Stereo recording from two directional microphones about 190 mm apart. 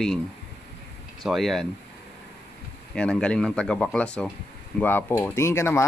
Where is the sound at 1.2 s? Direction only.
Centre (ahead or behind).